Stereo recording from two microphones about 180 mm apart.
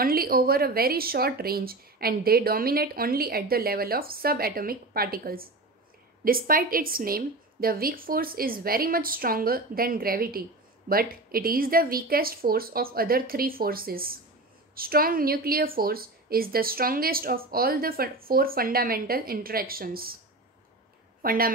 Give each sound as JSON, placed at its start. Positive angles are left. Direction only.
{"t": 0.0, "sound": "a woman's voice", "side_deg": -55}
{"t": 21.2, "sound": "speech", "side_deg": -55}